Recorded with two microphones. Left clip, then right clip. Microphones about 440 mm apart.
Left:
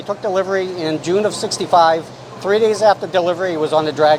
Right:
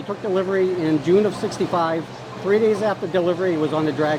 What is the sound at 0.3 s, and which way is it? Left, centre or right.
Speech, left.